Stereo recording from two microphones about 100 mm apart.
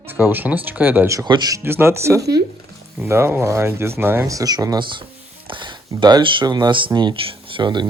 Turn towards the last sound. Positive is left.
turn(degrees=-50)  # may be behind; listen again after turning